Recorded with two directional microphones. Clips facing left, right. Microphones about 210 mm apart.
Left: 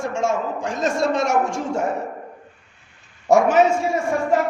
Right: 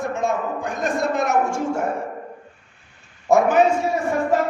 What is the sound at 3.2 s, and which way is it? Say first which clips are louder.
Speech: left 1 dB; 75° left (ahead or behind).